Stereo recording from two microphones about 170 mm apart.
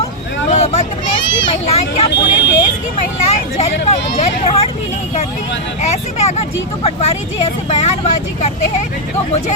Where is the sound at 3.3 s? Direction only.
40° left (ahead or behind).